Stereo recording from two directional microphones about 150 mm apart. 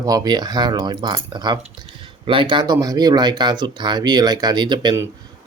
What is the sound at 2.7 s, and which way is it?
Speech, 25° right (ahead or behind).